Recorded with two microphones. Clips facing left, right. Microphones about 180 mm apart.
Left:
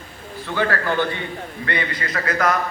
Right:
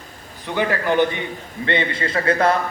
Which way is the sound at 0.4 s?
15° right (ahead or behind).